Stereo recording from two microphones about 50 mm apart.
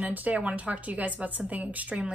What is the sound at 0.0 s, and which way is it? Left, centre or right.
A woman's voice, right.